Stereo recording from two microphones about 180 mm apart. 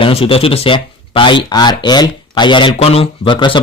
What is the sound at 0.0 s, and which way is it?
Speech, 30° left (ahead or behind).